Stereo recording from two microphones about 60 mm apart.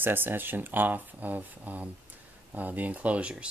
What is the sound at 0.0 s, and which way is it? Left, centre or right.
Speech, right.